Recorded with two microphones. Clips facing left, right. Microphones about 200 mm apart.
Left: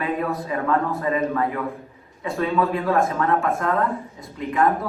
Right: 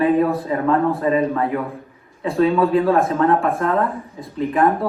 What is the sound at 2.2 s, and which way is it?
Speech, 30° right (ahead or behind).